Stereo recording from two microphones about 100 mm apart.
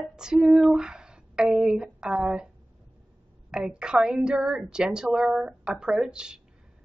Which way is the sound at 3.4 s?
10° right (ahead or behind).